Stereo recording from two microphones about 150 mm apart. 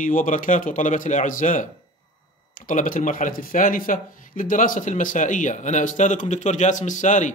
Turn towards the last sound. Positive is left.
turn(degrees=55)  # may be behind; listen again after turning